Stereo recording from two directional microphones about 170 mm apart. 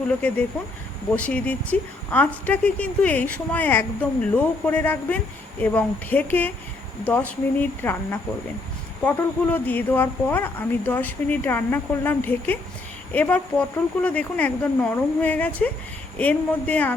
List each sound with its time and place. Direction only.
0.1 s speech: 10° left (ahead or behind)